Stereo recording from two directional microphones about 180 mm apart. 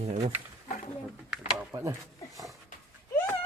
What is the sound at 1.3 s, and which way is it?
Speech, 5° right (ahead or behind).